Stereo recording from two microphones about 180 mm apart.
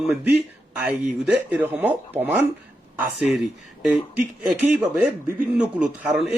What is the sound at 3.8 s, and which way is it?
Speech, 5° right (ahead or behind).